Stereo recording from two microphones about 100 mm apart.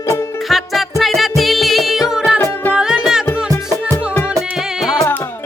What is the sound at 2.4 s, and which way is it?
Music, 20° left (ahead or behind).